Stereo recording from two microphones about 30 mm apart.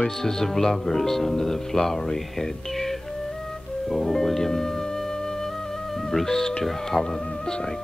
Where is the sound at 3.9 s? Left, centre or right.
Centre.